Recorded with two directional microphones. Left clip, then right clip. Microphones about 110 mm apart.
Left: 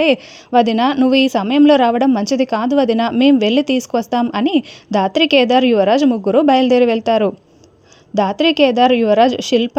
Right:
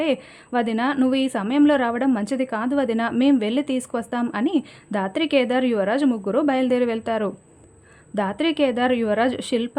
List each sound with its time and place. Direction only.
0.0 s a woman's voice: 45° left (ahead or behind)